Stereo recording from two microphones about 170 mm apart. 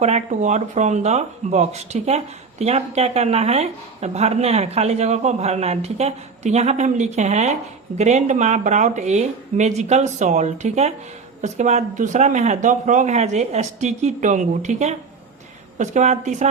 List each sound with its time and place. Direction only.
0.0 s speech: 40° right (ahead or behind)